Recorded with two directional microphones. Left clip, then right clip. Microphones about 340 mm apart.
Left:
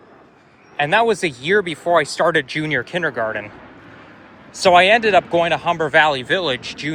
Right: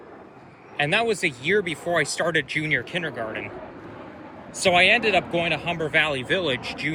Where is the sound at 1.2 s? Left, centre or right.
Left.